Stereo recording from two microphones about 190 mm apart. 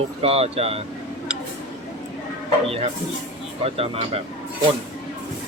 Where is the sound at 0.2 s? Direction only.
30° right (ahead or behind).